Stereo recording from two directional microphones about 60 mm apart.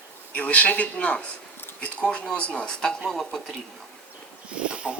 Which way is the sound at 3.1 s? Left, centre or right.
Centre.